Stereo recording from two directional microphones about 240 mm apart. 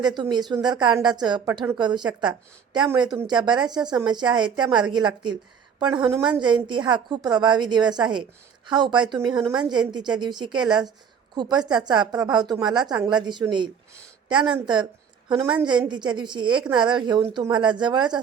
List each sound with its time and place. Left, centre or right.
0.0 s a woman's voice: centre